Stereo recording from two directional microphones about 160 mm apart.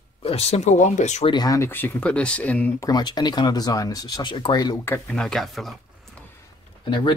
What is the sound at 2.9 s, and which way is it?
Speech, 25° left (ahead or behind).